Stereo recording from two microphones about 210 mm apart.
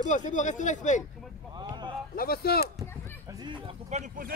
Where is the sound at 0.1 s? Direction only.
35° left (ahead or behind).